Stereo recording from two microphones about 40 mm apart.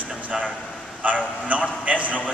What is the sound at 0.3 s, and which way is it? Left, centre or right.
Air conditioning, centre.